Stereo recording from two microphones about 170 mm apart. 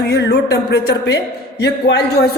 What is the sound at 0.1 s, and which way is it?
A woman's voice, 80° left.